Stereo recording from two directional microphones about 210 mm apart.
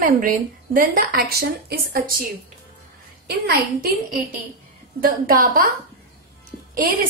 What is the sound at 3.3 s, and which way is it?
Speech, 50° right (ahead or behind).